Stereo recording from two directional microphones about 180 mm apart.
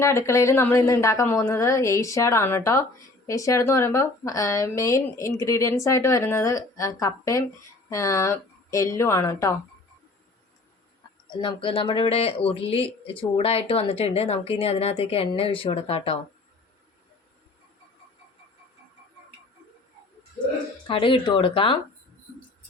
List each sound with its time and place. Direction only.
0.0 s speech: 15° left (ahead or behind)
11.3 s speech: 25° left (ahead or behind)
20.8 s speech: 30° left (ahead or behind)